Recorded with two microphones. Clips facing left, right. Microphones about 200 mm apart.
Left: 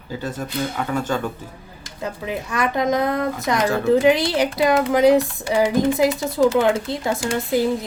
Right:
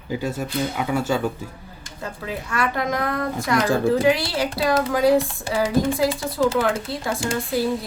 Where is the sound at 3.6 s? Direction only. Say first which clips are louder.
Right 1 dB; 30° right (ahead or behind).